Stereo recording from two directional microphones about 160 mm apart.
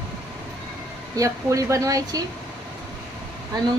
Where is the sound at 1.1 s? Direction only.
20° right (ahead or behind).